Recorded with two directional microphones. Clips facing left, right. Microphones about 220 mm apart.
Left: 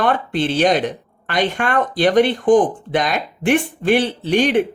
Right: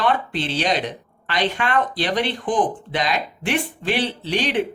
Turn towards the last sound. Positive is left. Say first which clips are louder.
# left 6 dB
turn(degrees=50)  # may be behind; listen again after turning